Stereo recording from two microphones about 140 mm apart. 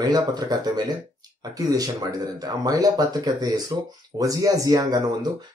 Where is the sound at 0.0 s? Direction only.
30° right (ahead or behind).